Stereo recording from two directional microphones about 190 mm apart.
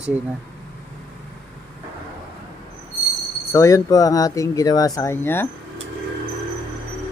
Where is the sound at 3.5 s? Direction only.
15° left (ahead or behind).